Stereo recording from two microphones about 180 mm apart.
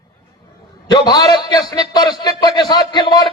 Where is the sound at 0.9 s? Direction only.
25° left (ahead or behind).